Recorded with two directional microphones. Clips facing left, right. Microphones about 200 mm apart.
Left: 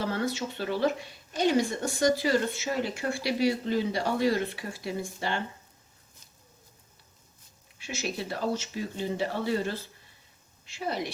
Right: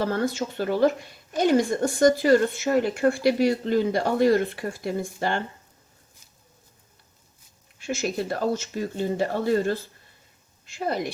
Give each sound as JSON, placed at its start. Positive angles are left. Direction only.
{"t": 0.0, "sound": "speech", "side_deg": -45}
{"t": 7.8, "sound": "speech", "side_deg": -50}